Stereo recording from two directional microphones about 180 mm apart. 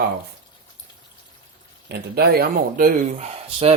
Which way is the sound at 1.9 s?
60° right (ahead or behind).